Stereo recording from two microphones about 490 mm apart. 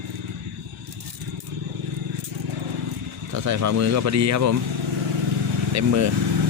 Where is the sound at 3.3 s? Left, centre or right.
Right.